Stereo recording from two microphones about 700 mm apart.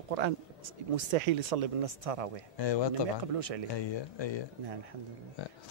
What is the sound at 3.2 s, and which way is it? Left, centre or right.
Speech, right.